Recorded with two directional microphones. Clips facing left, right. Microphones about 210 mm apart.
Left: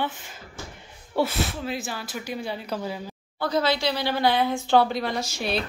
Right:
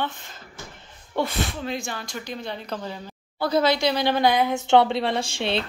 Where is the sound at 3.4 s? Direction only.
15° right (ahead or behind).